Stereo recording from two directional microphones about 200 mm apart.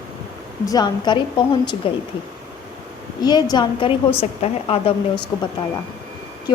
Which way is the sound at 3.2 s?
20° left (ahead or behind).